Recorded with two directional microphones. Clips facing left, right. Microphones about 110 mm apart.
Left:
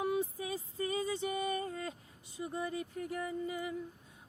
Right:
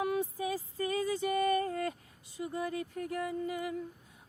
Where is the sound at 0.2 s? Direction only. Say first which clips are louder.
Right 3 dB; 20° left (ahead or behind).